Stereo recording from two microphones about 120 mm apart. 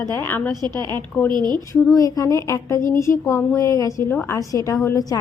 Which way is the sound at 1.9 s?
30° left (ahead or behind).